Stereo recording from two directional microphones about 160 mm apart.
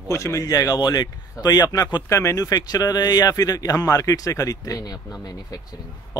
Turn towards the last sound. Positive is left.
turn(degrees=25)  # may be behind; listen again after turning